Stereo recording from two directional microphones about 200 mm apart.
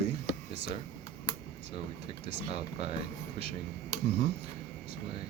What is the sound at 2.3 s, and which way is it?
Speech, 30° right (ahead or behind).